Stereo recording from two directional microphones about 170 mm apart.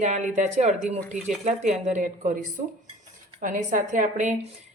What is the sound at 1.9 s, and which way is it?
Speech, 45° right (ahead or behind).